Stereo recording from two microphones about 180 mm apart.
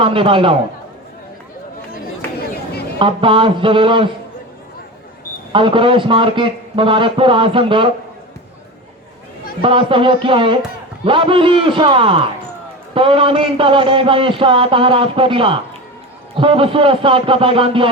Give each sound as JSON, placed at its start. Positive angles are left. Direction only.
{"t": 0.0, "sound": "a man's voice", "side_deg": -30}
{"t": 3.0, "sound": "a man's voice", "side_deg": -30}
{"t": 5.5, "sound": "a man's voice", "side_deg": -30}
{"t": 9.6, "sound": "a man's voice", "side_deg": -30}